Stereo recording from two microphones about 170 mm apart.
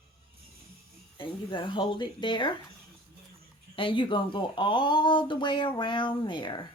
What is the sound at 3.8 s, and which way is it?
Speech, 30° left (ahead or behind).